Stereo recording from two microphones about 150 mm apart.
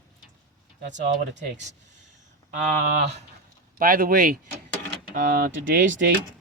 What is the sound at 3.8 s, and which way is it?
Speech, 75° right (ahead or behind).